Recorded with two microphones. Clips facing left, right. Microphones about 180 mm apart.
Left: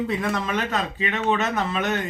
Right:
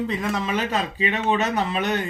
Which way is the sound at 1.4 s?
35° right (ahead or behind).